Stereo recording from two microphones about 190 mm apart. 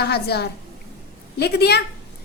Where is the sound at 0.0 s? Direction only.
60° left (ahead or behind).